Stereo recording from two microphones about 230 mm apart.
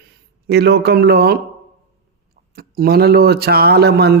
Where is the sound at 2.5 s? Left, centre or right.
Right.